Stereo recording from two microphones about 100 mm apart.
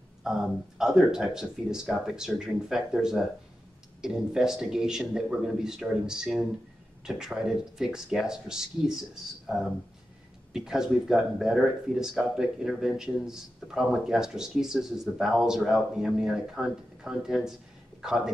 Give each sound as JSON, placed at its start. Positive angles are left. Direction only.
{"t": 0.2, "sound": "a man's voice", "side_deg": -5}
{"t": 10.5, "sound": "speech", "side_deg": -5}